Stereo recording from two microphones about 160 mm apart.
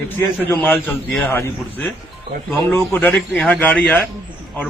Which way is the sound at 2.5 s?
10° left (ahead or behind).